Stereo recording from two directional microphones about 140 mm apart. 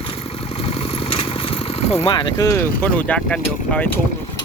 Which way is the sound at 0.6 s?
45° left (ahead or behind).